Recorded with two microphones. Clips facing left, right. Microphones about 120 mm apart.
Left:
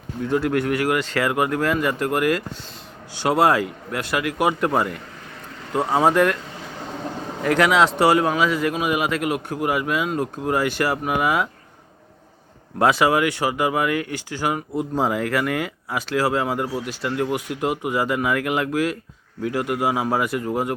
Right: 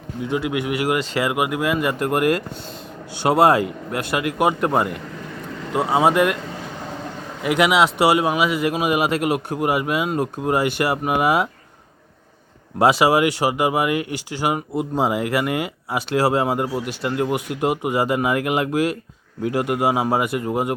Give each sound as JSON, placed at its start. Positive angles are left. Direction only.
{"t": 0.2, "sound": "speech", "side_deg": -10}
{"t": 3.2, "sound": "speech", "side_deg": -30}
{"t": 4.4, "sound": "speech", "side_deg": 0}
{"t": 7.4, "sound": "speech", "side_deg": -10}
{"t": 9.0, "sound": "speech", "side_deg": -30}
{"t": 12.8, "sound": "speech", "side_deg": -15}
{"t": 15.3, "sound": "speech", "side_deg": -10}
{"t": 15.5, "sound": "speech", "side_deg": -25}